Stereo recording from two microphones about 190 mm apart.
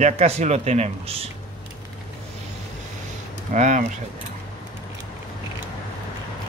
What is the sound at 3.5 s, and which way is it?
Speech, 40° right (ahead or behind).